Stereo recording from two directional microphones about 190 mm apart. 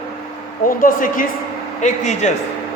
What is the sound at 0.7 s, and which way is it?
A man's voice, 45° left (ahead or behind).